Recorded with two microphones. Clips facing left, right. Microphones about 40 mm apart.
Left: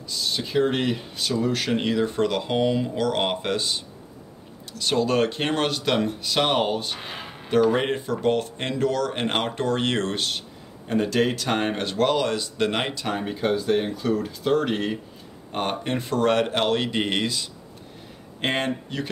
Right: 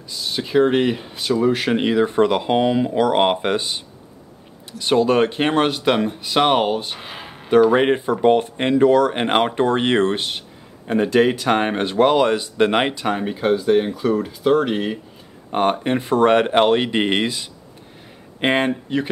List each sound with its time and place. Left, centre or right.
0.1 s speech: centre
7.0 s a sound: centre
7.7 s speech: right
15.8 s speech: centre